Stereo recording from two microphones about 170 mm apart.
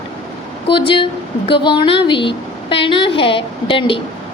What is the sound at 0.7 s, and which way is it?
A woman's voice, 30° left (ahead or behind).